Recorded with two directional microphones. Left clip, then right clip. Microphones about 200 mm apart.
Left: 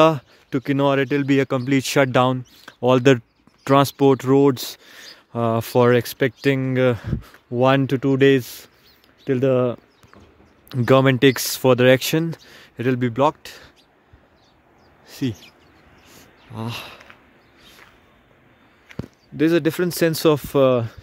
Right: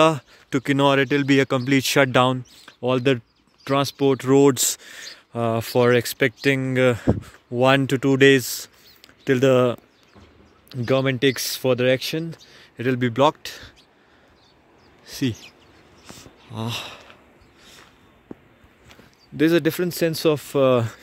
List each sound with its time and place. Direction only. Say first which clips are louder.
0.5 s speech: right 1 dB; centre (ahead or behind)
2.6 s speech: left 6 dB; 25° left (ahead or behind)
4.3 s speech: even; 5° left (ahead or behind)
10.9 s speech: left 5 dB; 30° left (ahead or behind)
12.7 s a man's voice: left 1 dB; 15° left (ahead or behind)
13.1 s speech: right 3 dB; 5° left (ahead or behind)
15.0 s speech: right 1 dB; 5° right (ahead or behind)
16.5 s speech: right 1 dB; centre (ahead or behind)
19.3 s speech: even; 5° left (ahead or behind)
19.8 s speech: left 3 dB; 25° left (ahead or behind)
20.7 s speech: right 1 dB; 10° right (ahead or behind)